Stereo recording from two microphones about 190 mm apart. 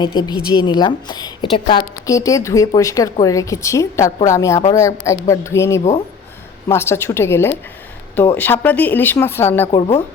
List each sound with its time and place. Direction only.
0.0 s a woman's voice: 20° left (ahead or behind)